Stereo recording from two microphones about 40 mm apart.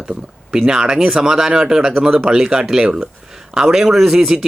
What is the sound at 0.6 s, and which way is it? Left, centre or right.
Speech, centre.